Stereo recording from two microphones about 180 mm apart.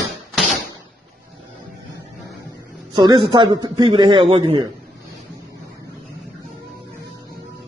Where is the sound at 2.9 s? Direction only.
25° right (ahead or behind).